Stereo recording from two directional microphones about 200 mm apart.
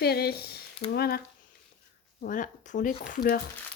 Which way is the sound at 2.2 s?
40° left (ahead or behind).